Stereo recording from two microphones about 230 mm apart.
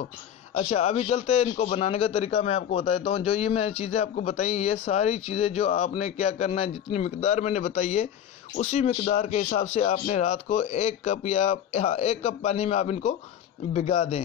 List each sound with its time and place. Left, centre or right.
0.6 s a man's voice: left